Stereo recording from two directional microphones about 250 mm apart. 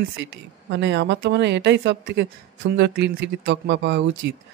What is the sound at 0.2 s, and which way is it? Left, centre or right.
Speech, right.